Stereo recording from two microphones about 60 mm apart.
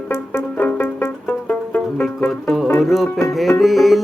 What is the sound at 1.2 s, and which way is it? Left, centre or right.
Music, left.